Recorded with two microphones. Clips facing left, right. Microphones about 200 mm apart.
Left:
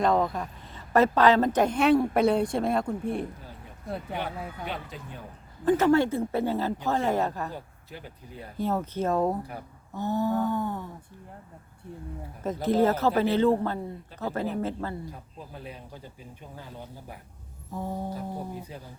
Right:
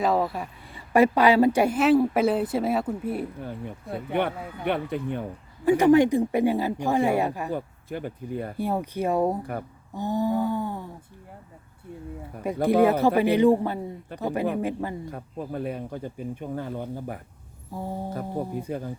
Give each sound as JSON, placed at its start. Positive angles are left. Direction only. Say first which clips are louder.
{"t": 0.0, "sound": "a woman's voice", "louder": "even", "side_deg": -5}
{"t": 3.4, "sound": "speech", "louder": "right 7 dB", "side_deg": -60}
{"t": 5.6, "sound": "speech", "louder": "right 4 dB", "side_deg": -15}
{"t": 7.5, "sound": "speech", "louder": "right 10 dB", "side_deg": -55}
{"t": 8.5, "sound": "speech", "louder": "left 2 dB", "side_deg": -10}
{"t": 12.6, "sound": "speech", "louder": "right 4 dB", "side_deg": -15}
{"t": 15.1, "sound": "speech", "louder": "right 11 dB", "side_deg": -55}
{"t": 17.7, "sound": "a sound", "louder": "right 1 dB", "side_deg": -10}
{"t": 18.1, "sound": "speech", "louder": "right 5 dB", "side_deg": -55}